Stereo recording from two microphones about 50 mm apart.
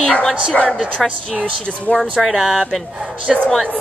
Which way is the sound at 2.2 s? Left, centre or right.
Centre.